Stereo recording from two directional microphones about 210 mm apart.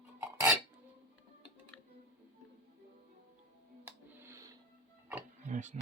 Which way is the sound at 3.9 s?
10° right (ahead or behind).